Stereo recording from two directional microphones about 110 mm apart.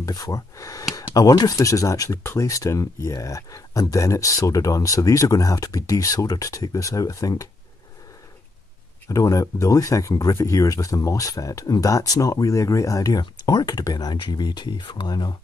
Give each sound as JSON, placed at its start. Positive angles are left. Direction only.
{"t": 0.0, "sound": "speech", "side_deg": 35}
{"t": 9.1, "sound": "speech", "side_deg": 30}